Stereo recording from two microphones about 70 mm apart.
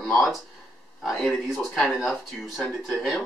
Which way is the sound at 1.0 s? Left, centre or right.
Centre.